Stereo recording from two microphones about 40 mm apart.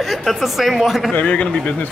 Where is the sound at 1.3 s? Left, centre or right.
Left.